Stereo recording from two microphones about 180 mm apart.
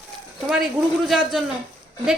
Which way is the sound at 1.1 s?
Centre (ahead or behind).